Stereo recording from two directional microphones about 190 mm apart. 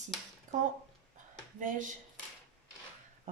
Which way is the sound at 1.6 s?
40° right (ahead or behind).